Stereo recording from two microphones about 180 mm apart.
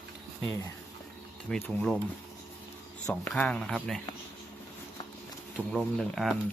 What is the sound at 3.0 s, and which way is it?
Speech, 5° left (ahead or behind).